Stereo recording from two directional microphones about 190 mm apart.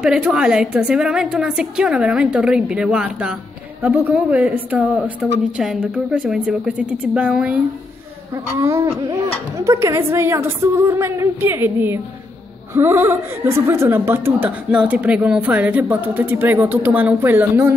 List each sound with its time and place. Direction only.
0.0 s a woman's voice: 5° right (ahead or behind)